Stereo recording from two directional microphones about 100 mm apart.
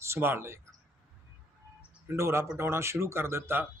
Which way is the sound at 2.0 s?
30° right (ahead or behind).